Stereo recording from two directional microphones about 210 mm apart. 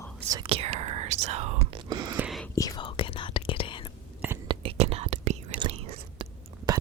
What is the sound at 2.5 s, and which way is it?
Whispering, 20° left (ahead or behind).